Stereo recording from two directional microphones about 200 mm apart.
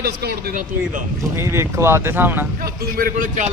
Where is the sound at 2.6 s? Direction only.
45° right (ahead or behind).